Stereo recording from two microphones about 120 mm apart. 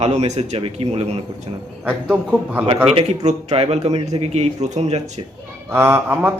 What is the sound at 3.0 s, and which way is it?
Speech, 65° right (ahead or behind).